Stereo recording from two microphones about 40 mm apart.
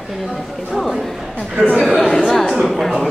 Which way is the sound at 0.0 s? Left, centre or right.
Centre.